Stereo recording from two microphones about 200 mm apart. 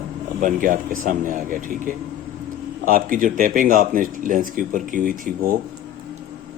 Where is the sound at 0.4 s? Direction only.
40° right (ahead or behind).